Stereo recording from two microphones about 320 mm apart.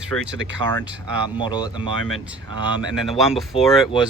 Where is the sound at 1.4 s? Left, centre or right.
Centre.